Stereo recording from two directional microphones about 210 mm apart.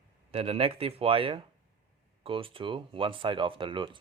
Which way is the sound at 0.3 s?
25° right (ahead or behind).